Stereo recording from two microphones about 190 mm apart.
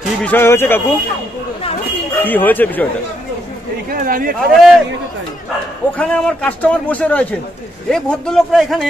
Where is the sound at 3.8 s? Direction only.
50° right (ahead or behind).